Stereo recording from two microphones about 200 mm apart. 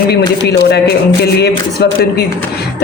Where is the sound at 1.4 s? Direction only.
55° left (ahead or behind).